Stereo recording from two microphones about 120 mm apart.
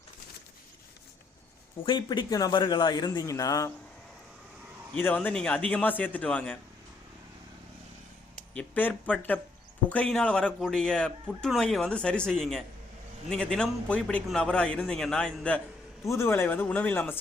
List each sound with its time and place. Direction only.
1.8 s speech: 40° left (ahead or behind)
4.9 s speech: 15° left (ahead or behind)
8.5 s speech: 10° left (ahead or behind)
16.0 s speech: 20° left (ahead or behind)